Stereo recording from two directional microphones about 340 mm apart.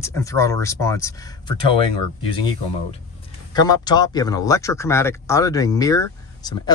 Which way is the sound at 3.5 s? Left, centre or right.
Centre.